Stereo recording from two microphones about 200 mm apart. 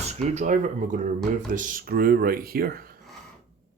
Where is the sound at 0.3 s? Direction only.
40° right (ahead or behind).